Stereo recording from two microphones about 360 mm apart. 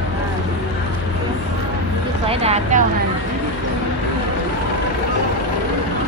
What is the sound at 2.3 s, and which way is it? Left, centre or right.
Speech, centre.